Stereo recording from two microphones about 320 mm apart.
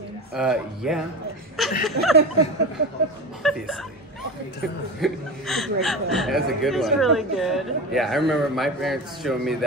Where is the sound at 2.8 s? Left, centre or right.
Right.